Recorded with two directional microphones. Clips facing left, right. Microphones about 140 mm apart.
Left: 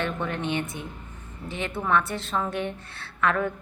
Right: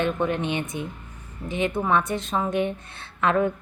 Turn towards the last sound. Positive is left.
turn(degrees=-20)  # may be behind; listen again after turning